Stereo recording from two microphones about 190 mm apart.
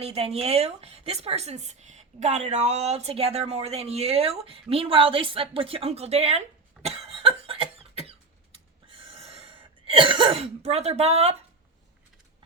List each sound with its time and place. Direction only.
0.0 s a woman's voice: 30° right (ahead or behind)
6.8 s cough: 30° right (ahead or behind)